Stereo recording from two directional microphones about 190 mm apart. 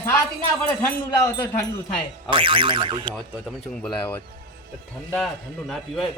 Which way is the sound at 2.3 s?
25° right (ahead or behind).